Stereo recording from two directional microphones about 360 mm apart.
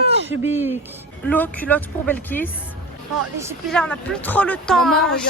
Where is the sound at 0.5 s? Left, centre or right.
Centre.